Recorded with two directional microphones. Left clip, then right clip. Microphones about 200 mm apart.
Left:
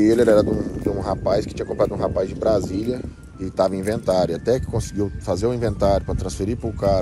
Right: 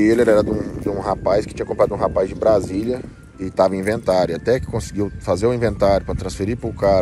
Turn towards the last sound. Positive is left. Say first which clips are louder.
# right 4 dB
turn(degrees=15)  # may be behind; listen again after turning